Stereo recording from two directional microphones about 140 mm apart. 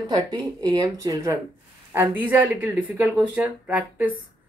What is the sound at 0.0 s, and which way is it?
Speech, 30° right (ahead or behind).